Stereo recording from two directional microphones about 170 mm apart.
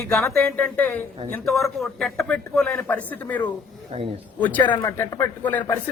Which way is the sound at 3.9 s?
35° right (ahead or behind).